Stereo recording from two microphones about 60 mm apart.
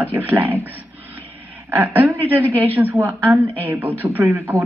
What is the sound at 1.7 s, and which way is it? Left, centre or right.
Speech, right.